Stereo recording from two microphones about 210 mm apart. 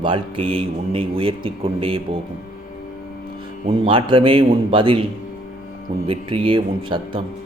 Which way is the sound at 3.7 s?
25° right (ahead or behind).